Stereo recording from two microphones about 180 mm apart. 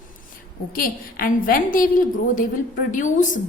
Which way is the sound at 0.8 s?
50° left (ahead or behind).